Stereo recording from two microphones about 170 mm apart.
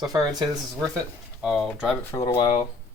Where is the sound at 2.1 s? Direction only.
20° left (ahead or behind).